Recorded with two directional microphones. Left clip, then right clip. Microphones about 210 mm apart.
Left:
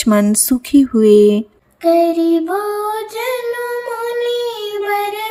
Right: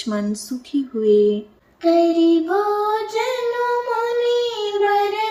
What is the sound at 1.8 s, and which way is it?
Child singing, 30° left (ahead or behind).